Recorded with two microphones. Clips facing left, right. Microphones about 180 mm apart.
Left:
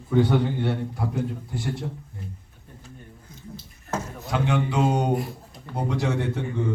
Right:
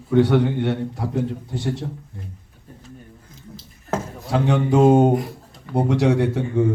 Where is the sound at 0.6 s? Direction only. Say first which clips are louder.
Right 4 dB; 20° right (ahead or behind).